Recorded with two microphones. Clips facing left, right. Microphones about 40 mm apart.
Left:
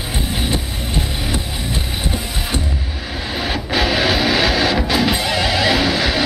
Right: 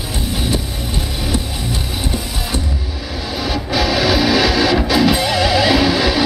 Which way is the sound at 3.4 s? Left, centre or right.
Left.